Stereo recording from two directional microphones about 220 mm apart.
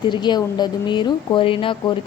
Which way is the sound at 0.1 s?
20° left (ahead or behind).